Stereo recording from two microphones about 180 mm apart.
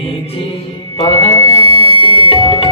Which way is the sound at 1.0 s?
30° left (ahead or behind).